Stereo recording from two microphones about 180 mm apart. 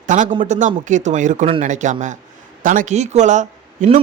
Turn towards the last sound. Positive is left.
turn(degrees=-40)  # may be behind; listen again after turning